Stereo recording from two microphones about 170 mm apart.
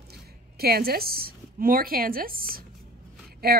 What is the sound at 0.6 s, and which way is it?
Speech, 65° right (ahead or behind).